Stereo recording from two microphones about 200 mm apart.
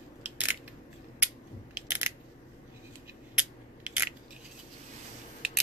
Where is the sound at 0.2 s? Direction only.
10° right (ahead or behind).